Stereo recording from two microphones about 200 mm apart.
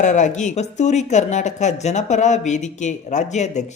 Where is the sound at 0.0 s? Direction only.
35° left (ahead or behind).